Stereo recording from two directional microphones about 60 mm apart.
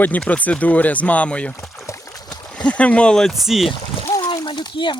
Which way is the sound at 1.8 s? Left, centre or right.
Left.